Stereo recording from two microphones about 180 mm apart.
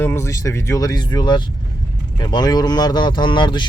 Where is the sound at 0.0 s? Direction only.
15° left (ahead or behind).